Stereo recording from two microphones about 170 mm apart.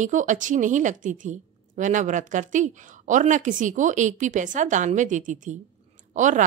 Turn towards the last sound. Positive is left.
turn(degrees=-50)  # may be behind; listen again after turning